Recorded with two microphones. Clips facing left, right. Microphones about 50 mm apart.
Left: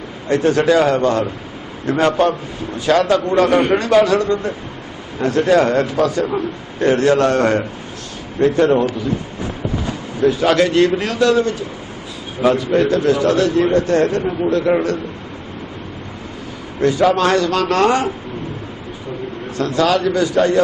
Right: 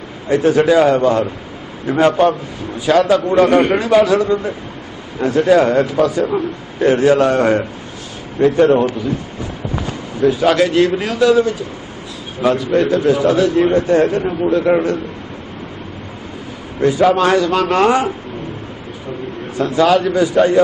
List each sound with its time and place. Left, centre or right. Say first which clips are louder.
0.3 s a man's voice: right 2 dB; centre
10.2 s a man's voice: right 1 dB; centre
16.8 s a man's voice: right 2 dB; centre
19.5 s a man's voice: right 3 dB; centre